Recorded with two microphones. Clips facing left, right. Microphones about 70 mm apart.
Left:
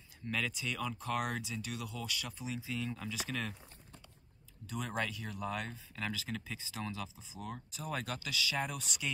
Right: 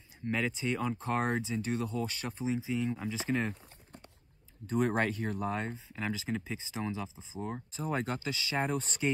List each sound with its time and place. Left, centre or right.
0.2 s speech: right
4.6 s speech: right